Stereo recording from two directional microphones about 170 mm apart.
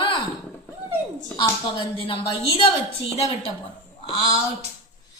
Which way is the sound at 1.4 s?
30° left (ahead or behind).